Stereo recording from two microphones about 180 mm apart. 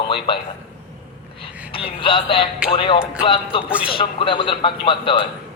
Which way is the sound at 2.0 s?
30° left (ahead or behind).